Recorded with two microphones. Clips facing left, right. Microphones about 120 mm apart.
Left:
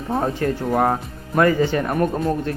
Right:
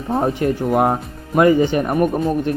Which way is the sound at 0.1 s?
20° right (ahead or behind).